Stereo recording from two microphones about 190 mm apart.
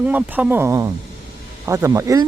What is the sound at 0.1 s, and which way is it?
Speech, 10° right (ahead or behind).